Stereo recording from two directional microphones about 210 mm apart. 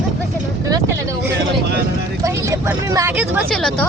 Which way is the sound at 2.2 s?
15° right (ahead or behind).